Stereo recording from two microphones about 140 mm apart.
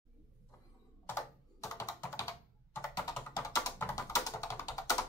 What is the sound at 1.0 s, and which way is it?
Computer keyboard, 20° left (ahead or behind).